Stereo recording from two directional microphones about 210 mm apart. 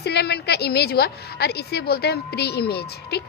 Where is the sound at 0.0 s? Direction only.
50° left (ahead or behind).